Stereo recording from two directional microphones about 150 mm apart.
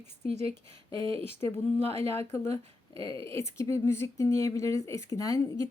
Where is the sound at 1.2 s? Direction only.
15° left (ahead or behind).